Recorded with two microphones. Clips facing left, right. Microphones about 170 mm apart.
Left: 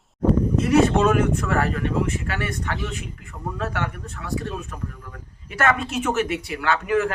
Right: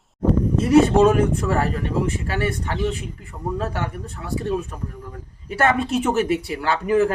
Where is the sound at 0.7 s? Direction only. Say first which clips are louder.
Right 4 dB; 30° right (ahead or behind).